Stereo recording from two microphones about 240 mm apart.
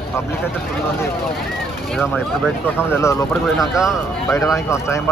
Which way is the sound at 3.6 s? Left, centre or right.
Centre.